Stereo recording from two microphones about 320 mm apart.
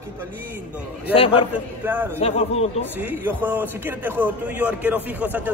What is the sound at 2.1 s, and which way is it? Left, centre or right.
Speech, centre.